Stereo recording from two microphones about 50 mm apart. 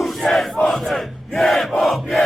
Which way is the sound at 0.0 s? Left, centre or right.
Centre.